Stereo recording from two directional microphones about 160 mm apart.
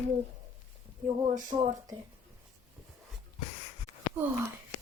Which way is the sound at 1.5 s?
40° right (ahead or behind).